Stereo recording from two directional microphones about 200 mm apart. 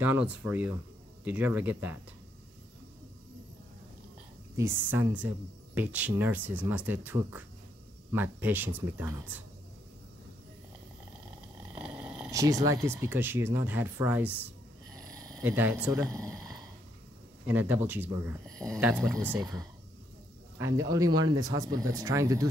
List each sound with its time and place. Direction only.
0.0 s speech: 10° right (ahead or behind)
4.6 s speech: 10° right (ahead or behind)
11.7 s a sound: 5° right (ahead or behind)
12.3 s speech: 15° right (ahead or behind)
15.0 s speech: 20° right (ahead or behind)
20.5 s speech: 15° right (ahead or behind)